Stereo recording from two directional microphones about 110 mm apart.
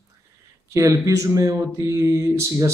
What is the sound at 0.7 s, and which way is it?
Speech, 30° right (ahead or behind).